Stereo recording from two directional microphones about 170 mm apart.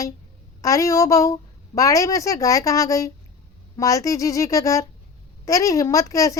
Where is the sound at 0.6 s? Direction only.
20° left (ahead or behind).